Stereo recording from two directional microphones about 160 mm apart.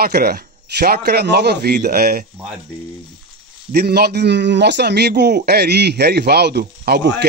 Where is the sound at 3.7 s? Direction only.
85° right.